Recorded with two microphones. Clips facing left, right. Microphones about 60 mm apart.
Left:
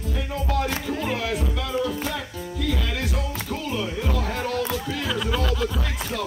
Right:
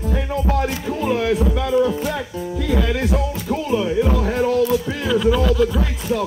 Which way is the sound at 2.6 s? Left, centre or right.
Right.